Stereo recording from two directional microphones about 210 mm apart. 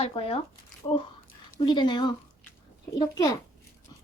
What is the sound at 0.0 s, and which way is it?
A child's voice, 25° left (ahead or behind).